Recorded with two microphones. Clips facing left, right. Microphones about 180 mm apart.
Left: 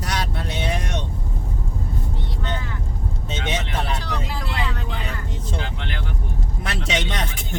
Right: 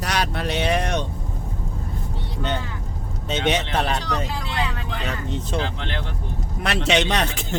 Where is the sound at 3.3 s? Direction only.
75° right (ahead or behind).